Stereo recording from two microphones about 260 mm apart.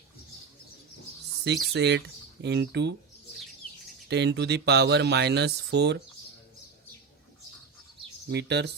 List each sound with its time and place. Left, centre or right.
1.5 s speech: right
4.1 s speech: right
8.3 s speech: right